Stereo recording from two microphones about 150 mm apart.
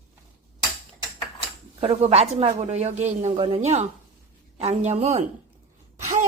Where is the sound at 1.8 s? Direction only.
40° right (ahead or behind).